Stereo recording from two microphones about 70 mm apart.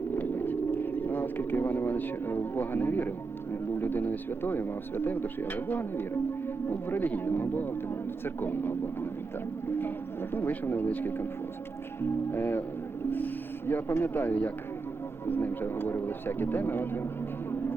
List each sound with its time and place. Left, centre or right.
0.2 s a sound: left
3.5 s speech: left
10.3 s speech: left